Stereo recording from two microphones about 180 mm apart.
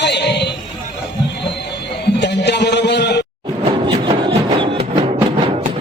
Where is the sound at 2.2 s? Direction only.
70° left (ahead or behind).